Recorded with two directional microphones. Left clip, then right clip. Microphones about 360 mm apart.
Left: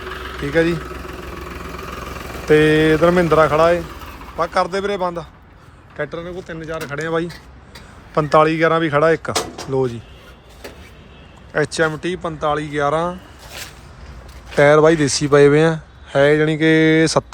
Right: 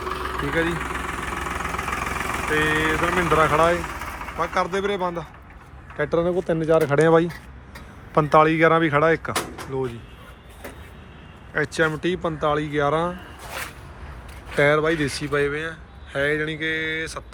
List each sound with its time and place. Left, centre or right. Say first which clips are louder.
0.0 s engine: right 2 dB; centre
2.5 s speech: left 9 dB; centre
11.5 s speech: left 4 dB; centre
14.5 s speech: left 8 dB; centre